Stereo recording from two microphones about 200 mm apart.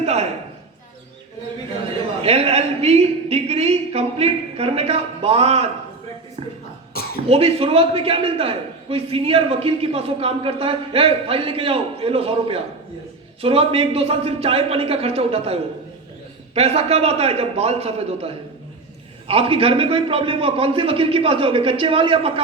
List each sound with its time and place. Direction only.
0.0 s a sound: 30° right (ahead or behind)
2.2 s a woman's voice: 30° right (ahead or behind)
7.3 s a man's voice: 30° right (ahead or behind)
16.6 s a man's voice: 30° right (ahead or behind)
19.3 s a man's voice: 30° right (ahead or behind)